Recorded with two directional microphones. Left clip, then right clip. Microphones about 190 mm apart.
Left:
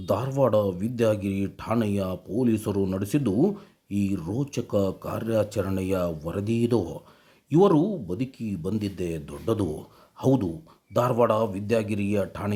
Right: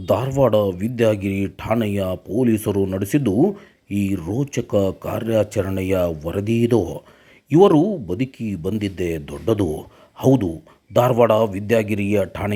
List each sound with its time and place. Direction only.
0.0 s speech: 15° right (ahead or behind)